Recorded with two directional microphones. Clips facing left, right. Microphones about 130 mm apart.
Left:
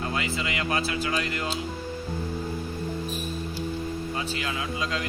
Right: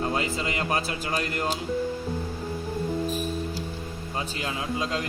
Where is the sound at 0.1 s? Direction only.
40° right (ahead or behind).